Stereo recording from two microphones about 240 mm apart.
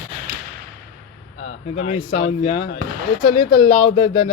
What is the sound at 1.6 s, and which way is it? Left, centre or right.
Speech, left.